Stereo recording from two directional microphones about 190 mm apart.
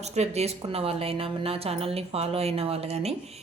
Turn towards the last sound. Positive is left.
turn(degrees=-35)  # may be behind; listen again after turning